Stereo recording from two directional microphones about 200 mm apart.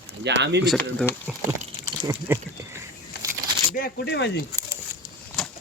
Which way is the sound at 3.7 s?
50° left (ahead or behind).